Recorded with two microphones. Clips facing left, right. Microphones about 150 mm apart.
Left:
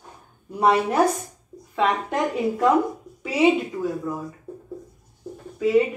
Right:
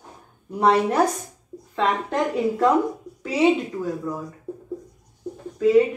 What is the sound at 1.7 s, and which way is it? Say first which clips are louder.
A woman's voice: even; 10° left (ahead or behind).